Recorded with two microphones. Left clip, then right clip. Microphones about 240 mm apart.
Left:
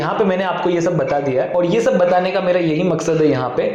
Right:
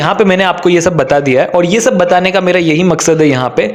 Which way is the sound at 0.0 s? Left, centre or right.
Right.